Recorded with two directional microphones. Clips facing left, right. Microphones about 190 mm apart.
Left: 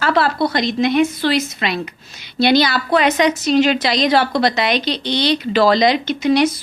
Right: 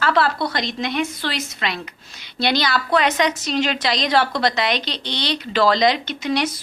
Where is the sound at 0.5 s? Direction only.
10° left (ahead or behind).